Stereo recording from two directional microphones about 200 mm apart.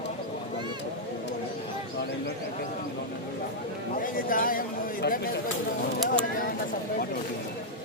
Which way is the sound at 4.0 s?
45° left (ahead or behind).